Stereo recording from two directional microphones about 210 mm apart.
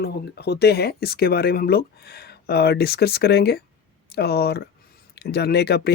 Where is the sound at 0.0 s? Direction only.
50° left (ahead or behind).